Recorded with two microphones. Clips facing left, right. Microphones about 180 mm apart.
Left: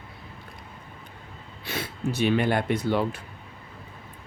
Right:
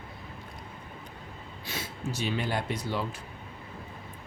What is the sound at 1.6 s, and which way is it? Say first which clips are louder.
Speech: left 6 dB; 60° left (ahead or behind).